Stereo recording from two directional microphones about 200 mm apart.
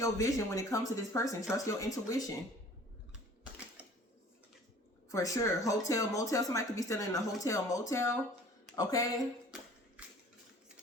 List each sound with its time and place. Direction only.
0.0 s speech: 15° left (ahead or behind)
3.8 s a sound: 5° right (ahead or behind)
5.0 s speech: 15° left (ahead or behind)